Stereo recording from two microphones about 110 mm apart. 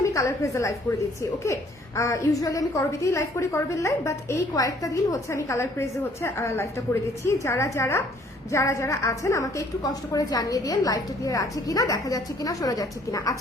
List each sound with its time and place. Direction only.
0.0 s a woman's voice: 30° left (ahead or behind)
2.0 s a woman's voice: 25° left (ahead or behind)